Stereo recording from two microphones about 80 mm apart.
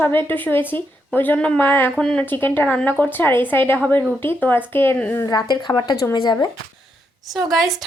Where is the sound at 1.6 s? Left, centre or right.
Left.